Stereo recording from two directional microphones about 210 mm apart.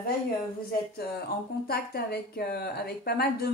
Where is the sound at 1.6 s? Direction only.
50° left (ahead or behind).